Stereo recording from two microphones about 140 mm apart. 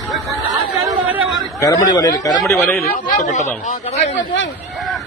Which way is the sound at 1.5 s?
25° left (ahead or behind).